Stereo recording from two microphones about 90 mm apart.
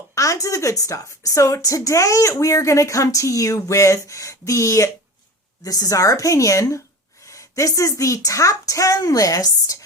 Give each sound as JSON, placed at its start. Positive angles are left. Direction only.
{"t": 0.1, "sound": "a woman's voice", "side_deg": 35}